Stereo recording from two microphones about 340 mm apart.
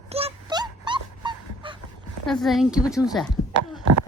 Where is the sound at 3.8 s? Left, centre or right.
Right.